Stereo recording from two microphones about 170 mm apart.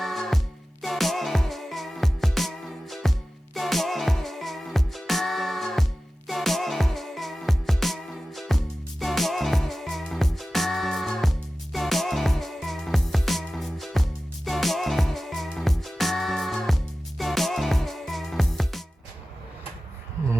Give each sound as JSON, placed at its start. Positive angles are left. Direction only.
{"t": 0.0, "sound": "music", "side_deg": 0}